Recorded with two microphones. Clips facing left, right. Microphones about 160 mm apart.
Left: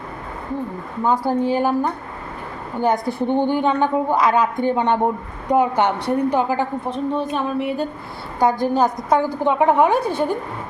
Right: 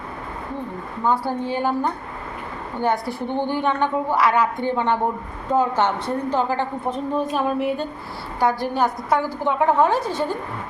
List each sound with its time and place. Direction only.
1.0 s a woman's voice: 15° left (ahead or behind)
7.3 s speech: centre (ahead or behind)
8.4 s a woman's voice: 20° left (ahead or behind)
10.0 s a woman's voice: 60° left (ahead or behind)